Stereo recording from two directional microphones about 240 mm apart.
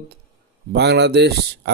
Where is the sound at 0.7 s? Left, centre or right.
Right.